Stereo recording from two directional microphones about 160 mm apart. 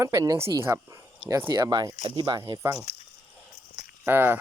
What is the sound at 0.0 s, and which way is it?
Speech, 20° right (ahead or behind).